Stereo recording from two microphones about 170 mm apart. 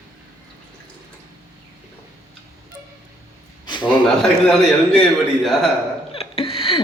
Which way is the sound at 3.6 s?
25° left (ahead or behind).